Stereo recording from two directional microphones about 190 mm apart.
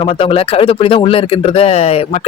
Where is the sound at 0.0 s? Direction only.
30° left (ahead or behind).